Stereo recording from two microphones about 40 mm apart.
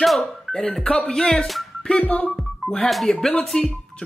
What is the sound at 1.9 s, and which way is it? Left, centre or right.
Music, left.